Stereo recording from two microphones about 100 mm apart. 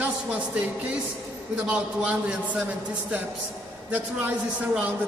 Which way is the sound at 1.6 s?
15° right (ahead or behind).